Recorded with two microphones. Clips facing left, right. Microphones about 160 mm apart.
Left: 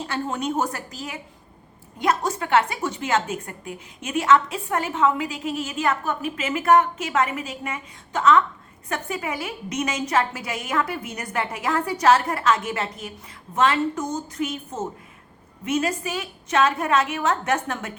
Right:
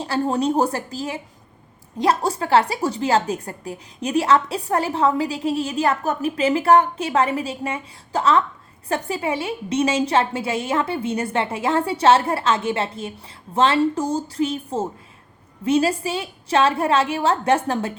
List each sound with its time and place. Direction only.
0.0 s a woman's voice: 35° right (ahead or behind)